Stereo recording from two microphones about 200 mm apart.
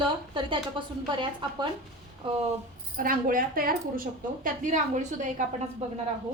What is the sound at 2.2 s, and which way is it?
Speech, 25° right (ahead or behind).